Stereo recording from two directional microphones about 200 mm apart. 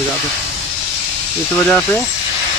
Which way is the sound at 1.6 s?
10° left (ahead or behind).